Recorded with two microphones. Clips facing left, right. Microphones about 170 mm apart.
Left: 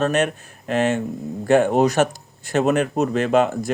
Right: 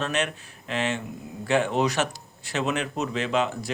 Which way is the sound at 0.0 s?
45° left (ahead or behind).